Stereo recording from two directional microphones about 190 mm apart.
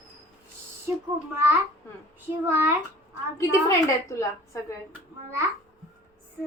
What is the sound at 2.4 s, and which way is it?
Speech, 10° right (ahead or behind).